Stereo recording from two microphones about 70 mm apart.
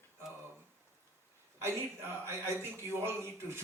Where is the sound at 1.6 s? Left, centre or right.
Right.